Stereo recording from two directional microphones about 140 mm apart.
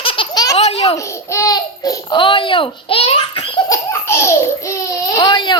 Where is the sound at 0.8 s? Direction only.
20° left (ahead or behind); by 3.4 s 40° left (ahead or behind).